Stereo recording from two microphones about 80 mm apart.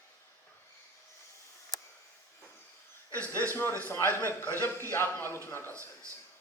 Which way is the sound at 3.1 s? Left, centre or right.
Left.